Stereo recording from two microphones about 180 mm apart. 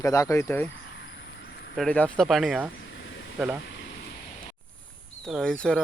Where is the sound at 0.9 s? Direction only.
70° left (ahead or behind).